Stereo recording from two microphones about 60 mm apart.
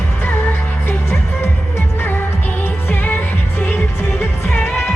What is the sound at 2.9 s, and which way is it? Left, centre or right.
Music of asia, left.